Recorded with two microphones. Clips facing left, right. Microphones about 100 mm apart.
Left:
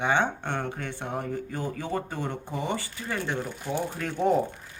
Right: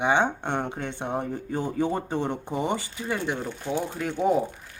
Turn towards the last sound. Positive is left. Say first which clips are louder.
# right 1 dB
turn(degrees=-10)  # may be behind; listen again after turning